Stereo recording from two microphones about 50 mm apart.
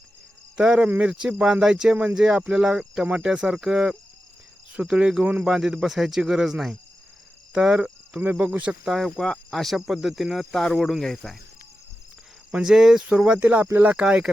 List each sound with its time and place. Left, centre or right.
0.5 s speech: centre
5.2 s speech: right
5.5 s speech: centre
8.4 s speech: right
9.0 s speech: centre
12.6 s speech: centre
13.1 s speech: right
13.4 s speech: right